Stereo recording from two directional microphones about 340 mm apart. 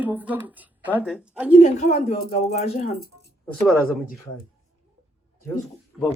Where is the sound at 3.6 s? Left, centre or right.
Centre.